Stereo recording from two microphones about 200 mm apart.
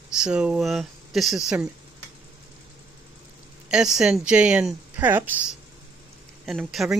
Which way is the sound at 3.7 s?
5° right (ahead or behind).